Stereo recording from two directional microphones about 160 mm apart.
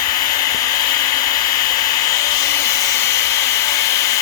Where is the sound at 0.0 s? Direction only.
25° left (ahead or behind).